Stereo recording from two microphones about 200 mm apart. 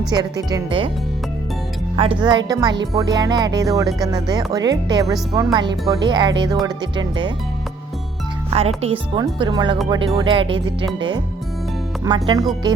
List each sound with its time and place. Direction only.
0.1 s speech: 20° right (ahead or behind)
2.0 s speech: 25° right (ahead or behind)
8.5 s speech: 30° right (ahead or behind)
12.0 s speech: 20° right (ahead or behind)